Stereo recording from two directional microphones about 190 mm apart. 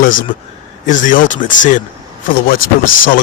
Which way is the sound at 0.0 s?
45° left (ahead or behind).